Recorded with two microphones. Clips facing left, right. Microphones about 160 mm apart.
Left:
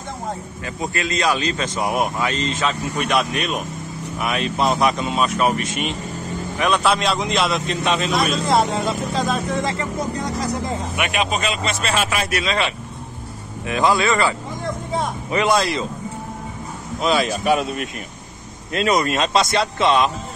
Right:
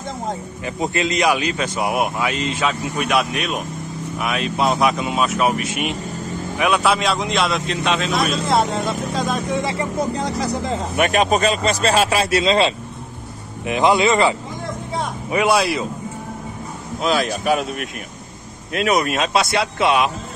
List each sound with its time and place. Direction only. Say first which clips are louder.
0.7 s a man's voice: right 4 dB; 20° right (ahead or behind); by 9.4 s centre (ahead or behind)
9.5 s speech: right 1 dB; 15° right (ahead or behind)
11.0 s speech: right 7 dB; 40° right (ahead or behind); by 14.3 s 20° right (ahead or behind)
15.3 s speech: right 1 dB; 10° right (ahead or behind)
17.0 s a man's voice: even; centre (ahead or behind)